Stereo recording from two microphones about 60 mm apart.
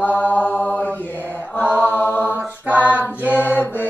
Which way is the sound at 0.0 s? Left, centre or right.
Left.